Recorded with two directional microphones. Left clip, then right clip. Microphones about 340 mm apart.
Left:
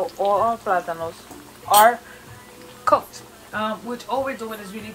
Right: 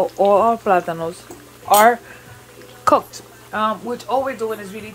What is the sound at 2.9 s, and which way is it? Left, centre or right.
Speech, centre.